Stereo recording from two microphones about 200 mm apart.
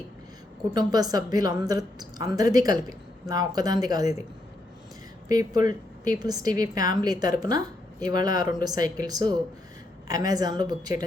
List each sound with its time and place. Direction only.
0.7 s a woman's voice: 20° right (ahead or behind)
5.3 s a woman's voice: 20° right (ahead or behind)